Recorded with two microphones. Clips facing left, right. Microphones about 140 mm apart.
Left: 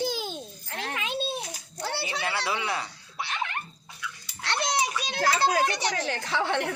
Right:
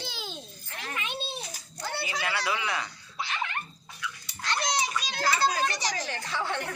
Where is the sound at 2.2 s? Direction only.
30° left (ahead or behind).